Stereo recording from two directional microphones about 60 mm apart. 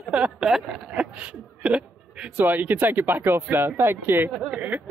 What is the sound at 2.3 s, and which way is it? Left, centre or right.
Speech, right.